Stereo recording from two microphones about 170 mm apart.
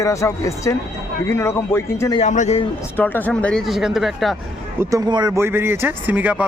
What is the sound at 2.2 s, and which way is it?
Speech, 45° left (ahead or behind).